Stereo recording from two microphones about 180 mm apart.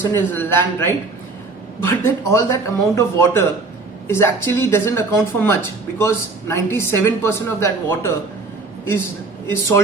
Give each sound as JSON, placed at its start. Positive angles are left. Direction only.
{"t": 0.0, "sound": "speech", "side_deg": 10}
{"t": 9.5, "sound": "speech", "side_deg": 15}